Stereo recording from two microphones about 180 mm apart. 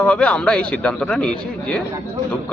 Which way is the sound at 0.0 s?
5° left (ahead or behind).